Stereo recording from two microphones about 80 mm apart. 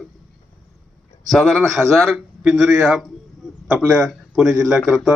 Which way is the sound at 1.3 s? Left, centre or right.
Centre.